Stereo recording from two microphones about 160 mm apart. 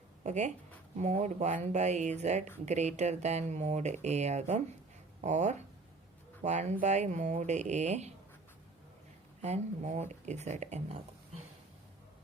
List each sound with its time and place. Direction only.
0.3 s speech: 45° right (ahead or behind)
9.4 s speech: 45° right (ahead or behind)